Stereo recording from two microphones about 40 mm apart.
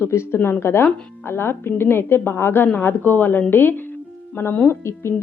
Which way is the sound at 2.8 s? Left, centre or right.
Left.